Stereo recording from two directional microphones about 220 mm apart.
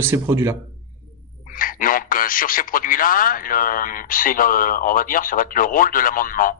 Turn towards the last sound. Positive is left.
turn(degrees=40)  # may be behind; listen again after turning